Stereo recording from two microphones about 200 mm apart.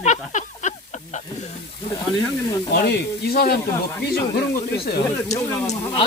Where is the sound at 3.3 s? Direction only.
50° left (ahead or behind).